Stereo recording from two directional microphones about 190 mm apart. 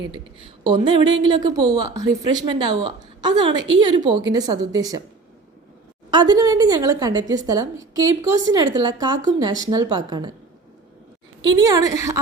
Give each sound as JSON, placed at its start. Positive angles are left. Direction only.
{"t": 0.0, "sound": "a woman's voice", "side_deg": -25}
{"t": 6.1, "sound": "a woman's voice", "side_deg": -20}
{"t": 11.5, "sound": "a woman's voice", "side_deg": -20}